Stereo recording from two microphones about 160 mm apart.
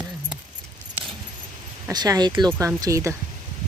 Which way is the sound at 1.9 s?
25° right (ahead or behind).